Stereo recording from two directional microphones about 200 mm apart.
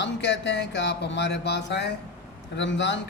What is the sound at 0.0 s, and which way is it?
Speech, 60° left (ahead or behind).